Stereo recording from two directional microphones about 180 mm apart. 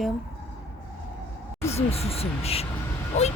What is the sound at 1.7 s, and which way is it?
Speech, 35° left (ahead or behind).